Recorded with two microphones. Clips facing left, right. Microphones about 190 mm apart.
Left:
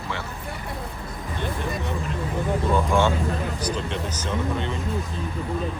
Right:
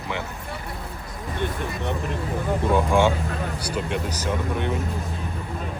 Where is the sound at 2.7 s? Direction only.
15° right (ahead or behind).